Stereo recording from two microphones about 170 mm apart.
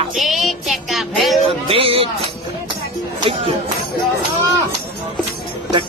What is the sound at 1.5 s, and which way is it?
Speech, 35° right (ahead or behind).